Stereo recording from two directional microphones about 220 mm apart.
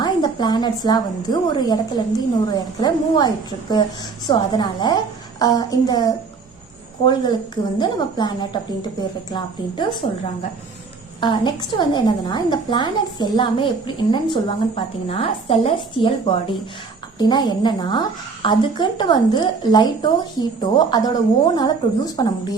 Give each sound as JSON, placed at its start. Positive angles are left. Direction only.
{"t": 0.0, "sound": "a sound", "side_deg": 20}
{"t": 0.9, "sound": "a woman's voice", "side_deg": 20}
{"t": 11.2, "sound": "a woman's voice", "side_deg": 20}